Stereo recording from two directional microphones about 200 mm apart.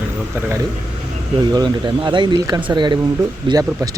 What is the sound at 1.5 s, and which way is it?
Speech, 20° right (ahead or behind).